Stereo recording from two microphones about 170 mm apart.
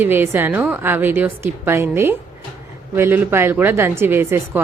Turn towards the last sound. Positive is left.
turn(degrees=-15)  # may be behind; listen again after turning